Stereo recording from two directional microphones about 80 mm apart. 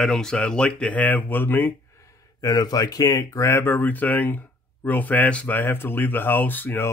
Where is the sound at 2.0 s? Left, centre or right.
Left.